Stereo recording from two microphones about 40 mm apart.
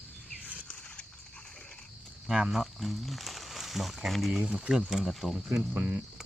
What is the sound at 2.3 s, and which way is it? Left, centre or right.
Speech, right.